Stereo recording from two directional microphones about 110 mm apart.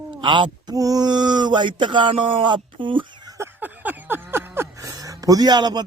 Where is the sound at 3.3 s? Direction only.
20° right (ahead or behind).